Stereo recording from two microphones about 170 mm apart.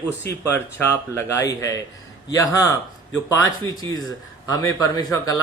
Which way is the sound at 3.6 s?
20° left (ahead or behind).